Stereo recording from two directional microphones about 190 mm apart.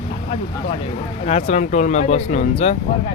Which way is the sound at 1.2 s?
35° left (ahead or behind).